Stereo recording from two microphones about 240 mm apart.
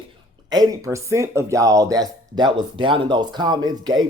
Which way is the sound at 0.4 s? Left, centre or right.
Centre.